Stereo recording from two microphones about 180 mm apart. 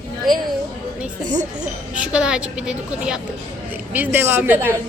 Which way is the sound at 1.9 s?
5° right (ahead or behind).